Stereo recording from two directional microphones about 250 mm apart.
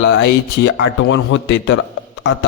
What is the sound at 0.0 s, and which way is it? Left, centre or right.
A man's voice, left.